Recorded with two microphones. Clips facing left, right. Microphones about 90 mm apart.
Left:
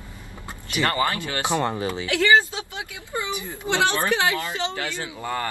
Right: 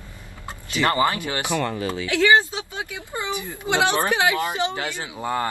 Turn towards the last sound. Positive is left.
turn(degrees=-20)  # may be behind; listen again after turning